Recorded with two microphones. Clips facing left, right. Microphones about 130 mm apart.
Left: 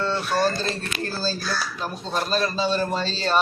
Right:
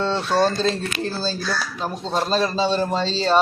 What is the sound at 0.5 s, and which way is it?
Speech, 90° right.